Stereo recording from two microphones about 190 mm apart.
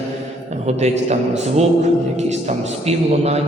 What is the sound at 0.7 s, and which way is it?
A man's voice, 35° right (ahead or behind).